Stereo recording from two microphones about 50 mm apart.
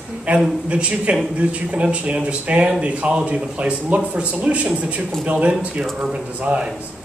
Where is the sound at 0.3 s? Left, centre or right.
Right.